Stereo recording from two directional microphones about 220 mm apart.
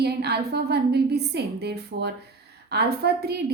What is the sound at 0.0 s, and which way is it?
A woman's voice, 45° right (ahead or behind).